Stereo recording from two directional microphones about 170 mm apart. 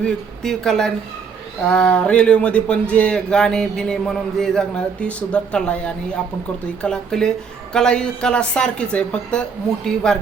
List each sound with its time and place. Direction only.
0.0 s a woman's voice: 5° left (ahead or behind)